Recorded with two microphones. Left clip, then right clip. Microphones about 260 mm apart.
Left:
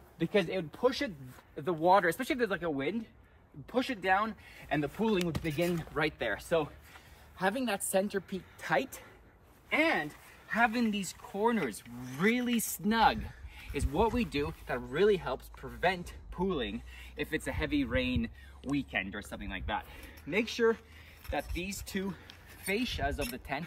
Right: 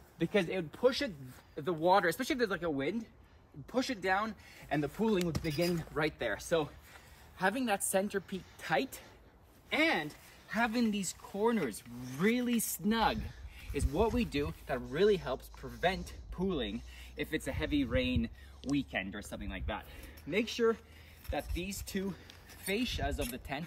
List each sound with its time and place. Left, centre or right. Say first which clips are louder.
0.2 s a woman's voice: left 2 dB; centre
1.8 s speech: left 3 dB; left
2.1 s speech: left 1 dB; centre
7.3 s a woman's voice: even; centre